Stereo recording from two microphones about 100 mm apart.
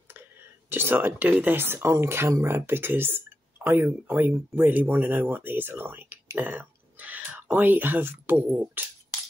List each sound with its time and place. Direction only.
0.7 s speech: 20° right (ahead or behind)